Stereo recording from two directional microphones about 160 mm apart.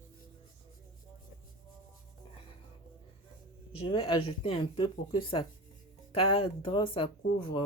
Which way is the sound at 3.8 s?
35° left (ahead or behind).